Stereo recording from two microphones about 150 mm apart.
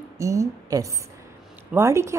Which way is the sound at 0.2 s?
20° right (ahead or behind).